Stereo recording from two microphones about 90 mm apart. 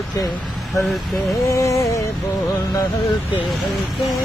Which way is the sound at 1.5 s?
35° left (ahead or behind).